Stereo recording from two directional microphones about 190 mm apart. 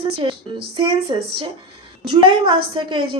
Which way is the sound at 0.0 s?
30° right (ahead or behind).